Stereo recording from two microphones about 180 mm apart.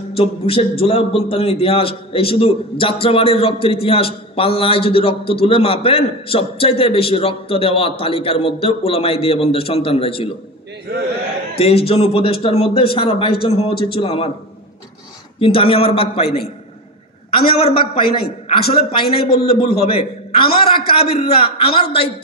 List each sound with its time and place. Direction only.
0.1 s a man's voice: 30° left (ahead or behind)
11.5 s a man's voice: 35° left (ahead or behind)
15.3 s a man's voice: 30° left (ahead or behind)
17.3 s a man's voice: 30° left (ahead or behind)